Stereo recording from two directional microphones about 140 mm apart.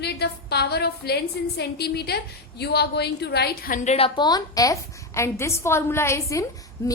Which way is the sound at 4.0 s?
35° left (ahead or behind).